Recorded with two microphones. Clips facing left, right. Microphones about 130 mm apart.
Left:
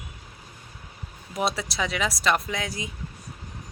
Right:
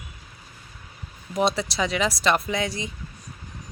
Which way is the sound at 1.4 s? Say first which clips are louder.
Right 4 dB; centre (ahead or behind).